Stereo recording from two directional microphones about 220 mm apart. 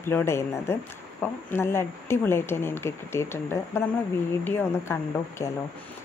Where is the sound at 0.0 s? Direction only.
10° left (ahead or behind).